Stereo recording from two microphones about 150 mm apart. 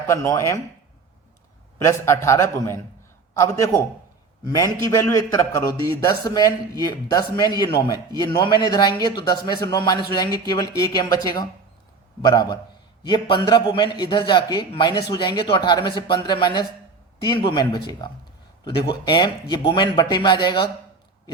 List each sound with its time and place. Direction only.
0.1 s a man's voice: 20° left (ahead or behind)
1.8 s a man's voice: 20° left (ahead or behind)